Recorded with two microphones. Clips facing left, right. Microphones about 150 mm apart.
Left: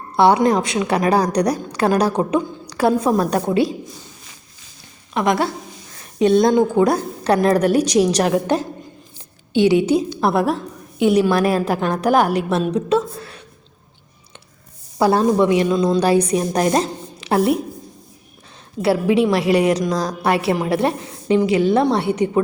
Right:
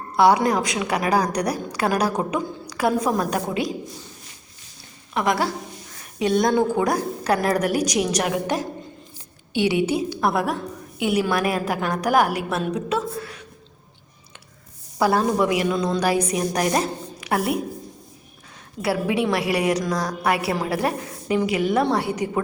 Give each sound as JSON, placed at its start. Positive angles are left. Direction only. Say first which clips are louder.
{"t": 0.2, "sound": "a woman's voice", "louder": "left 3 dB", "side_deg": 25}
{"t": 5.1, "sound": "a woman's voice", "louder": "left 3 dB", "side_deg": 20}
{"t": 14.9, "sound": "a woman's voice", "louder": "left 4 dB", "side_deg": 25}
{"t": 18.8, "sound": "a woman's voice", "louder": "left 6 dB", "side_deg": 25}